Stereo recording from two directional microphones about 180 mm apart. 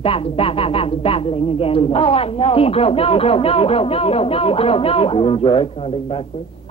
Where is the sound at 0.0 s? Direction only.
30° left (ahead or behind).